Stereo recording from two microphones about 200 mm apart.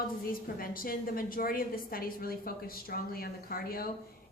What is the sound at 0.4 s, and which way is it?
A woman's voice, 45° left (ahead or behind).